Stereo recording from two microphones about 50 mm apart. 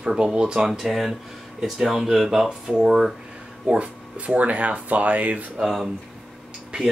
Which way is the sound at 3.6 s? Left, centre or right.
Right.